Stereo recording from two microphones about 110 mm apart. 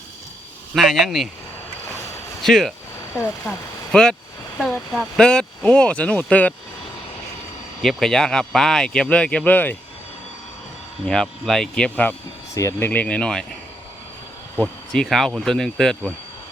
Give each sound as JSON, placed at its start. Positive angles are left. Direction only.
{"t": 0.7, "sound": "speech", "side_deg": 0}
{"t": 2.4, "sound": "speech", "side_deg": 5}
{"t": 7.8, "sound": "speech", "side_deg": 0}
{"t": 11.0, "sound": "speech", "side_deg": 5}
{"t": 12.5, "sound": "speech", "side_deg": 30}
{"t": 12.9, "sound": "speech", "side_deg": 15}
{"t": 14.9, "sound": "speech", "side_deg": 0}